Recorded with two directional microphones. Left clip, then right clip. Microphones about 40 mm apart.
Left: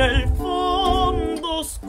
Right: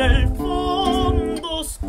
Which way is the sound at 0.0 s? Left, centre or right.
Left.